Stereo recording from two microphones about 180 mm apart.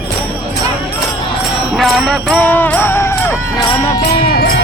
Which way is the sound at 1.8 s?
5° left (ahead or behind).